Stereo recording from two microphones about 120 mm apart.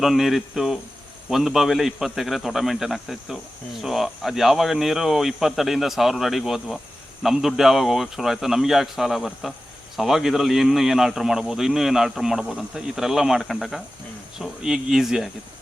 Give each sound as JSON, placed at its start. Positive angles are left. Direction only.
{"t": 0.0, "sound": "a man's voice", "side_deg": 0}